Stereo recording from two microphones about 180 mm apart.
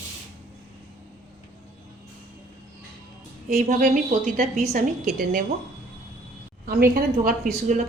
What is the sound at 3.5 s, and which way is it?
A woman's voice, 50° right (ahead or behind).